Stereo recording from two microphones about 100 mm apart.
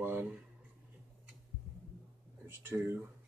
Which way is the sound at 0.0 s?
20° right (ahead or behind).